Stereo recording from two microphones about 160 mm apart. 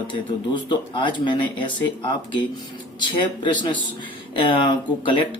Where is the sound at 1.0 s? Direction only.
30° left (ahead or behind).